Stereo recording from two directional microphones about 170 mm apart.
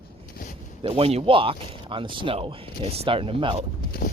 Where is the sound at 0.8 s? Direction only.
35° right (ahead or behind).